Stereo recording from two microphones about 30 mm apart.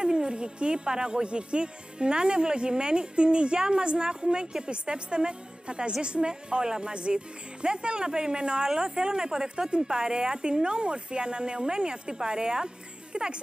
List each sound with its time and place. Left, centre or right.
0.0 s speech: right